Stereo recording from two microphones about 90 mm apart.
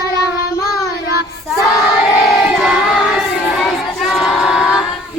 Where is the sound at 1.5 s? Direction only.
Centre (ahead or behind).